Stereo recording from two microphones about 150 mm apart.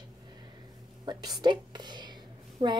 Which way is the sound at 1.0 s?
25° right (ahead or behind).